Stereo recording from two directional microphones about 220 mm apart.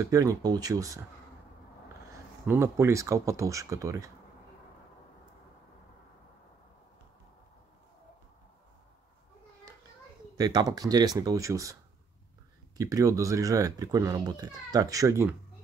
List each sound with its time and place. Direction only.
0.0 s speech: 15° right (ahead or behind)
2.4 s speech: 10° right (ahead or behind)
10.3 s speech: 20° right (ahead or behind)
12.7 s speech: 15° right (ahead or behind)